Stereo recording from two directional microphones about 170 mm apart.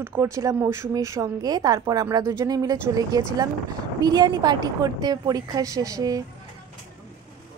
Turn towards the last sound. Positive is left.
turn(degrees=-20)  # may be behind; listen again after turning